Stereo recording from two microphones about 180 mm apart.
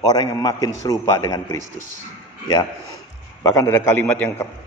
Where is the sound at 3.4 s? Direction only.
20° left (ahead or behind).